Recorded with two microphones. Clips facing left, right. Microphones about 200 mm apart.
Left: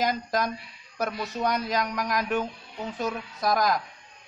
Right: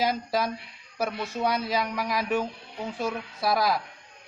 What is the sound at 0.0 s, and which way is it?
Speech, 5° right (ahead or behind).